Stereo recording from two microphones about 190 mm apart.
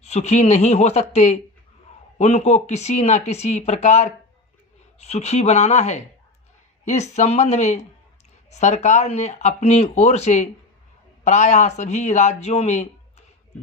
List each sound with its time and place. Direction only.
0.0 s speech: 35° left (ahead or behind)